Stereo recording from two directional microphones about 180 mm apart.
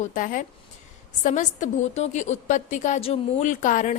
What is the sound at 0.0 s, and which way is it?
A woman's voice, 50° left (ahead or behind).